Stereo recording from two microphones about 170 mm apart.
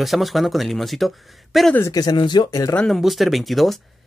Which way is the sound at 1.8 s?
20° left (ahead or behind).